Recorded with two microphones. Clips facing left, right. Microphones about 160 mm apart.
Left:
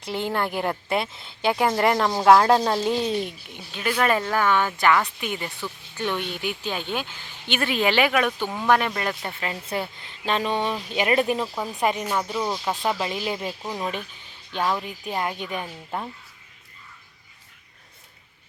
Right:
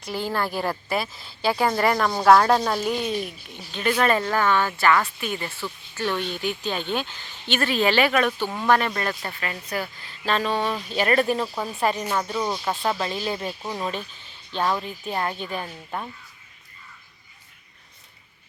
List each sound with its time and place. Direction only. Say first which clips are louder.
0.0 s a woman's voice: left 1 dB; 20° left (ahead or behind)
3.5 s a woman's voice: right 4 dB; 5° left (ahead or behind)
11.3 s speech: right 1 dB; 5° left (ahead or behind)
11.8 s a woman's voice: even; 15° left (ahead or behind)
13.6 s speech: even; centre (ahead or behind)
14.7 s a woman's voice: even; 10° left (ahead or behind)